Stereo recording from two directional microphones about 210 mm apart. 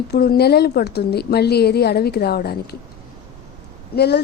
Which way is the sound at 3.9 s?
50° left (ahead or behind).